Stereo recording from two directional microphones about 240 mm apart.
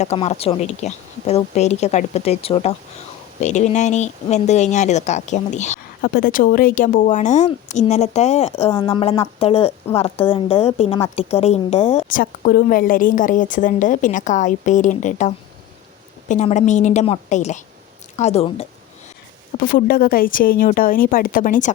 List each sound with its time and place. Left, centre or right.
0.0 s speech: left
16.3 s speech: left
19.5 s a woman's voice: left